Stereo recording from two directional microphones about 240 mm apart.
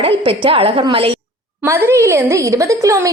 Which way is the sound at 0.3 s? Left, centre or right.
Right.